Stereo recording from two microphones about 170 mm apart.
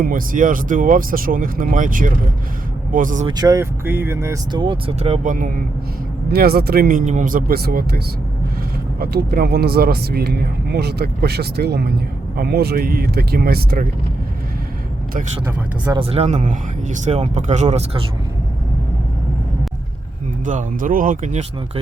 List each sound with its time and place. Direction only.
0.0 s speech: 55° right (ahead or behind)
3.2 s speech: 25° right (ahead or behind)
4.6 s speech: 30° right (ahead or behind); by 5.6 s 50° right (ahead or behind)
6.3 s speech: 65° right (ahead or behind)
15.9 s speech: 35° right (ahead or behind)
20.4 s speech: 50° right (ahead or behind)